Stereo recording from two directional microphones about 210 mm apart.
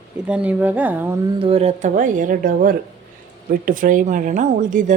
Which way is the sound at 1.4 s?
30° right (ahead or behind).